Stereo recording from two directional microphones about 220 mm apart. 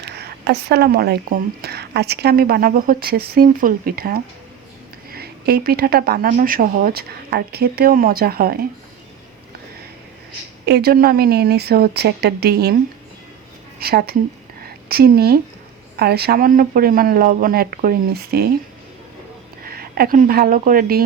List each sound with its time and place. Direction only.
0.0 s speech: 50° right (ahead or behind)
10.7 s speech: 45° right (ahead or behind)
13.7 s speech: 45° right (ahead or behind)
14.6 s a sound: 45° right (ahead or behind)
16.0 s speech: 45° right (ahead or behind)
19.6 s speech: 45° right (ahead or behind)